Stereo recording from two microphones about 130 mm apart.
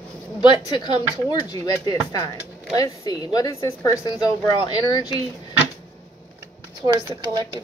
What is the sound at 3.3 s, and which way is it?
A woman's voice, 25° left (ahead or behind).